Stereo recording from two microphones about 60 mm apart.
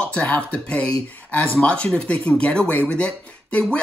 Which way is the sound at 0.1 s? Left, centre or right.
Left.